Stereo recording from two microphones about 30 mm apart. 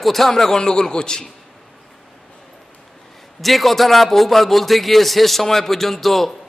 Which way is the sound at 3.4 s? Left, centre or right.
Centre.